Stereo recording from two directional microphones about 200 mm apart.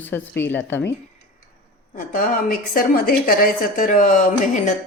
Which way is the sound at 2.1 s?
45° left (ahead or behind).